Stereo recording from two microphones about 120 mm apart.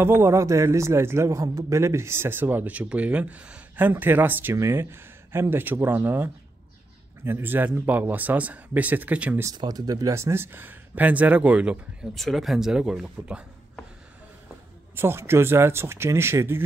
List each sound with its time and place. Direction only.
0.0 s a man's voice: 20° right (ahead or behind)
9.6 s speech: 35° right (ahead or behind); by 13.5 s 5° right (ahead or behind)
15.0 s a man's voice: 20° right (ahead or behind)